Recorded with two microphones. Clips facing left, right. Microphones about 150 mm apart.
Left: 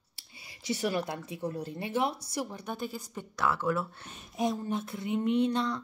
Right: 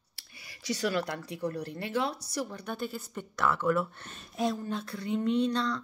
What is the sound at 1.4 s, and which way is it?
Speech, 75° right (ahead or behind).